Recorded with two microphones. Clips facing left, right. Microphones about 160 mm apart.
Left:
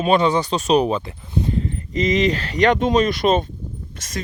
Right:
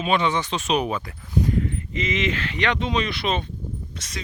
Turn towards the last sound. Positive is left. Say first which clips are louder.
# right 1 dB
turn(degrees=50)  # may be behind; listen again after turning